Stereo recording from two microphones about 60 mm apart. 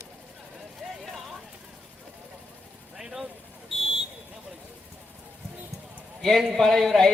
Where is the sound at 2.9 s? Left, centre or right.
Centre.